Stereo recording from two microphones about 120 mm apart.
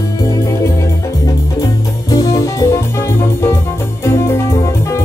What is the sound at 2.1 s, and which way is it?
Music, 30° left (ahead or behind).